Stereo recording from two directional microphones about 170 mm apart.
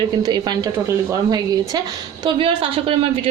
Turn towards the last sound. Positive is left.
turn(degrees=-35)  # may be behind; listen again after turning